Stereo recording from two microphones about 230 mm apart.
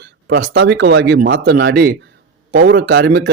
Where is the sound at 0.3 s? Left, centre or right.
Right.